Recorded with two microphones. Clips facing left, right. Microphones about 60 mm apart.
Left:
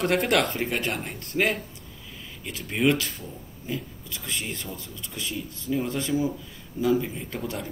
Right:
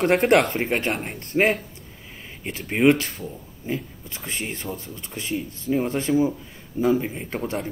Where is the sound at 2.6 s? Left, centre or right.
Right.